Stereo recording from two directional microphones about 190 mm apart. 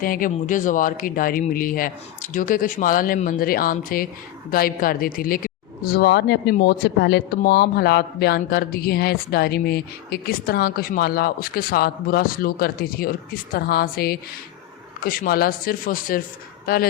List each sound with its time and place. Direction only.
0.0 s speech: 45° left (ahead or behind)